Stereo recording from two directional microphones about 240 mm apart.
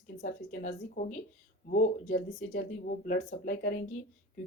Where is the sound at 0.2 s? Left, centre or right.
Left.